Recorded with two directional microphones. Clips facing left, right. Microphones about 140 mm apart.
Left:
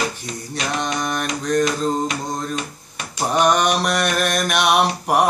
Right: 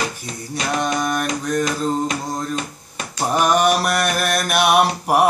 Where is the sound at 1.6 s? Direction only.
35° right (ahead or behind).